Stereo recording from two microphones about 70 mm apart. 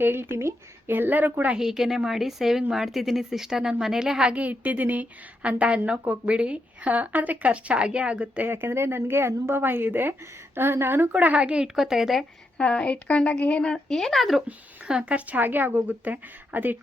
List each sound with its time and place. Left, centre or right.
0.0 s a woman's voice: right
1.5 s a woman's voice: centre
8.4 s a woman's voice: right
11.1 s a woman's voice: right; by 12.2 s centre
12.5 s speech: centre
14.4 s a woman's voice: centre